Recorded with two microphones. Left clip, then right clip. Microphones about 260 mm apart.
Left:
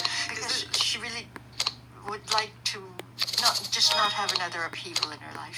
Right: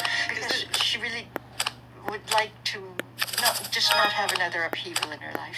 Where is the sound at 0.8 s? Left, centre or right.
Centre.